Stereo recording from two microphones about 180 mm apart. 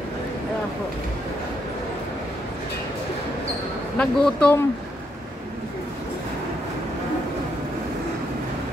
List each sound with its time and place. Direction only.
4.0 s speech: 5° left (ahead or behind)